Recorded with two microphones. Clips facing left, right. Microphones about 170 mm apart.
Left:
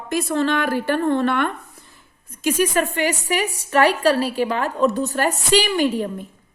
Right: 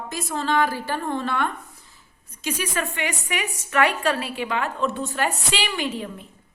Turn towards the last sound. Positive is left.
turn(degrees=45)  # may be behind; listen again after turning